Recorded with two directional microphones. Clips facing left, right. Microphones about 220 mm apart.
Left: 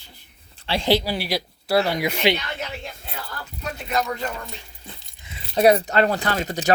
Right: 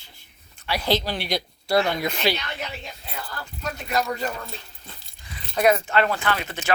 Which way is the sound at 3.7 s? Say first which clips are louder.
Left 1 dB; 5° right (ahead or behind).